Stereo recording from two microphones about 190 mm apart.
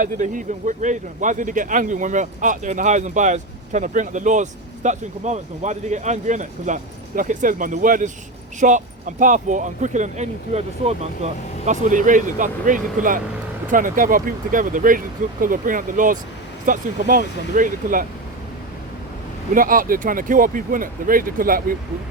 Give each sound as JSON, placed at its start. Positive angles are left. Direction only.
{"t": 0.0, "sound": "speech", "side_deg": -40}
{"t": 19.5, "sound": "speech", "side_deg": -45}